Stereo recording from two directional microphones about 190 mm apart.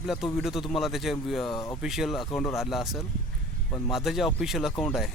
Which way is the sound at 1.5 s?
15° left (ahead or behind).